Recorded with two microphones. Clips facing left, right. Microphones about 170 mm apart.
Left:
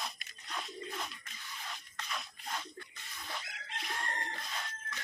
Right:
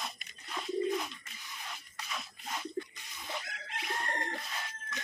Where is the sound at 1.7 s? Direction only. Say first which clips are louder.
Even; 5° right (ahead or behind).